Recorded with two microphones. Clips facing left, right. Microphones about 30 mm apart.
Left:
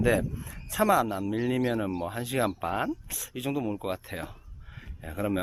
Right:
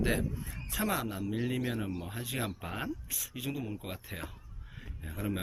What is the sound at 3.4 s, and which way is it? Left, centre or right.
Speech, left.